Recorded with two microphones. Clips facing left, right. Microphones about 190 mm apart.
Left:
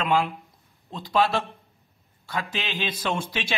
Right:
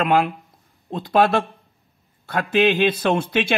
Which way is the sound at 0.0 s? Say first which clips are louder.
Right 5 dB; 55° right (ahead or behind).